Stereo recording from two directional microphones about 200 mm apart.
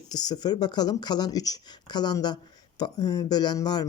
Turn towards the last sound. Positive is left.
turn(degrees=20)  # may be behind; listen again after turning